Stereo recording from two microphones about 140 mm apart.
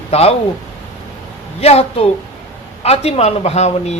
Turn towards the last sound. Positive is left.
turn(degrees=50)  # may be behind; listen again after turning